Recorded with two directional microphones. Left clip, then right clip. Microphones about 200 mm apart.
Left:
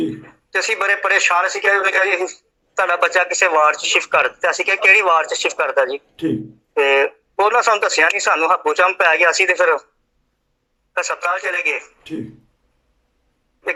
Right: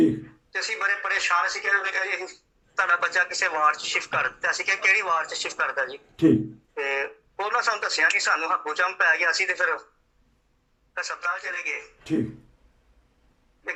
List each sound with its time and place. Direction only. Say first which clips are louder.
0.2 s speech: left 9 dB; 55° left (ahead or behind)
11.0 s speech: left 8 dB; 60° left (ahead or behind)